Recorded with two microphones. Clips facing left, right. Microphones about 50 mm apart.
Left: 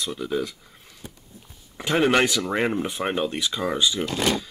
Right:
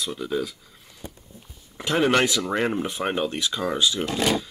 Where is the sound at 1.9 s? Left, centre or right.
Centre.